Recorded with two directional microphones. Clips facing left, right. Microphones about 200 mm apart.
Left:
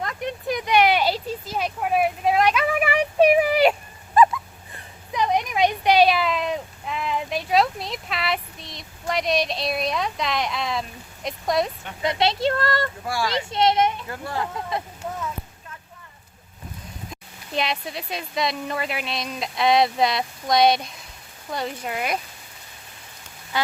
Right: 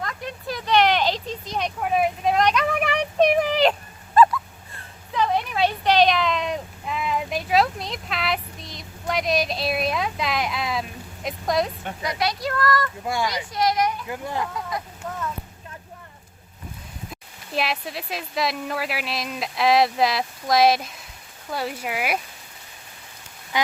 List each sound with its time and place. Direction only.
0.2 s a sound: 20° left (ahead or behind); by 11.7 s centre (ahead or behind)
12.0 s speech: 25° left (ahead or behind)
13.1 s speech: 20° right (ahead or behind)
13.5 s a woman's voice: 25° left (ahead or behind)
14.1 s speech: 15° right (ahead or behind)
17.1 s speech: 5° right (ahead or behind)